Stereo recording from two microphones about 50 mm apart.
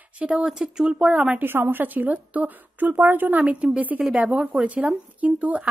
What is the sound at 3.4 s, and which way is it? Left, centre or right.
A woman's voice, right.